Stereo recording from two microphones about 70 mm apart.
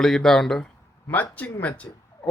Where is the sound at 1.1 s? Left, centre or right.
Left.